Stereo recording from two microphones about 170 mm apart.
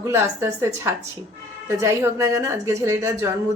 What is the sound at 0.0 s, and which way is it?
Speech, 15° right (ahead or behind).